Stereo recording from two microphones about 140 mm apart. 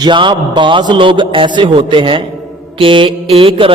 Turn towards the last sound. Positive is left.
turn(degrees=-40)  # may be behind; listen again after turning